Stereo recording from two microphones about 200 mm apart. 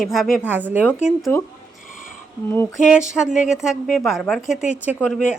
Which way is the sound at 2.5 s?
10° left (ahead or behind).